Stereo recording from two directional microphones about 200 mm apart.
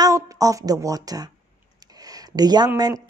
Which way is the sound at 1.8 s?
20° right (ahead or behind).